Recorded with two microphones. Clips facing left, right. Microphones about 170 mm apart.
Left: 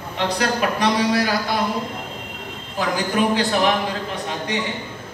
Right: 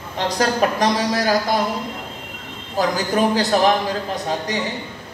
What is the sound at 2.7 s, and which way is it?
Speech, 40° right (ahead or behind).